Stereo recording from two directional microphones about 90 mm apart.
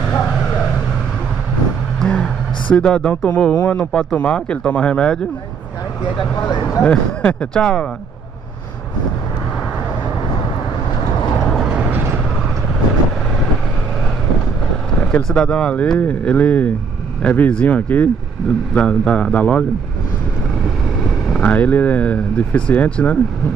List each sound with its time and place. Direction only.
2.0 s speech: 10° left (ahead or behind)
6.8 s speech: 15° left (ahead or behind)
11.6 s vehicle: 10° right (ahead or behind)
15.2 s speech: 10° left (ahead or behind)
21.4 s speech: 15° left (ahead or behind)